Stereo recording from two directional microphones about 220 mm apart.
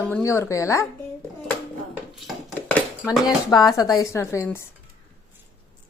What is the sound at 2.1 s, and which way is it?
Dishes, 5° left (ahead or behind).